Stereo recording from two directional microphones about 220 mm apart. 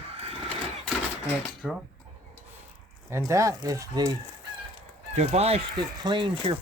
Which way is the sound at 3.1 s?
15° right (ahead or behind).